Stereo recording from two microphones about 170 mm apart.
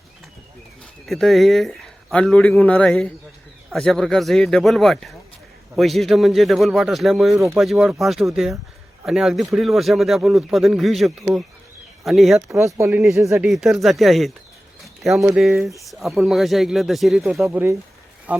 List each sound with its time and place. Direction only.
1.0 s speech: centre (ahead or behind)
12.5 s speech: 20° right (ahead or behind)
13.5 s speech: centre (ahead or behind)
17.5 s speech: 15° right (ahead or behind)